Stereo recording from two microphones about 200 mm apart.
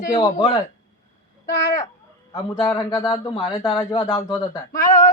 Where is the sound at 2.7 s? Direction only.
20° left (ahead or behind).